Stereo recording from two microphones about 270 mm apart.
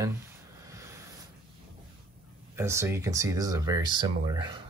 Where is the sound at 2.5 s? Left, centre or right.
Centre.